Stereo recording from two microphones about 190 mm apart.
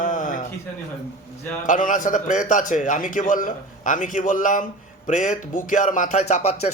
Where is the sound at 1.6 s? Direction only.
45° left (ahead or behind).